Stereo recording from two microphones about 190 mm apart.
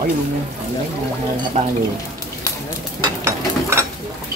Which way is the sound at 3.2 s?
15° right (ahead or behind).